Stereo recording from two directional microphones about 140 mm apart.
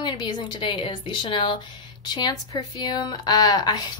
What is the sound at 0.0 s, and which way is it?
A woman's voice, 30° left (ahead or behind).